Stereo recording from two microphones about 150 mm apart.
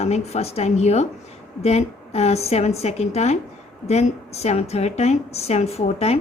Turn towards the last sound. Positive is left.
turn(degrees=45)  # may be behind; listen again after turning